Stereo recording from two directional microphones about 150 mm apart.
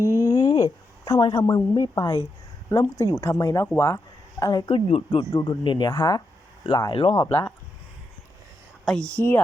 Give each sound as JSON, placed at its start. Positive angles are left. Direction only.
{"t": 0.2, "sound": "a sound", "side_deg": 20}
{"t": 0.4, "sound": "a woman's voice", "side_deg": 25}
{"t": 7.3, "sound": "speech", "side_deg": 10}
{"t": 8.8, "sound": "speech", "side_deg": 5}